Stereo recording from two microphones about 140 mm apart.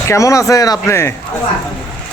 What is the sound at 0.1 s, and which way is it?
Speech, 20° left (ahead or behind).